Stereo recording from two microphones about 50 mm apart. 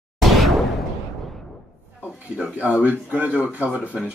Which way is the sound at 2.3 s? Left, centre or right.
Right.